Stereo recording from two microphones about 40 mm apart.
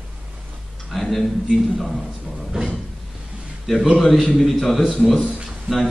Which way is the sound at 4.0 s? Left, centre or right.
Centre.